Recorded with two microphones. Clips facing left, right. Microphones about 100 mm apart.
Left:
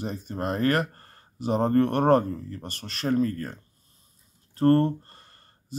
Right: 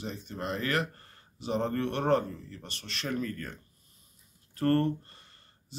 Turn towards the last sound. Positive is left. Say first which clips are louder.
# left 9 dB
turn(degrees=45)  # may be behind; listen again after turning